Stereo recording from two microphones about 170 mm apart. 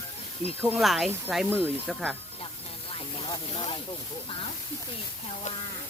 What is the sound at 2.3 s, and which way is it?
Snake, 35° left (ahead or behind).